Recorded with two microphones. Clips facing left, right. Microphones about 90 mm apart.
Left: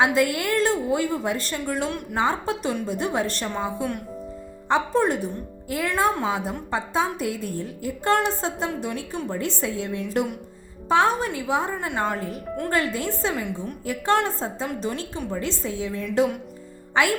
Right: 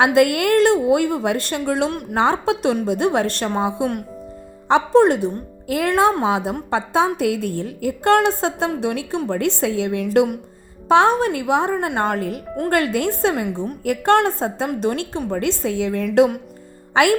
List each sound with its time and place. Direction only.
0.0 s a woman's voice: 65° right (ahead or behind)
4.7 s a woman's voice: 80° right
16.9 s music: 75° right (ahead or behind)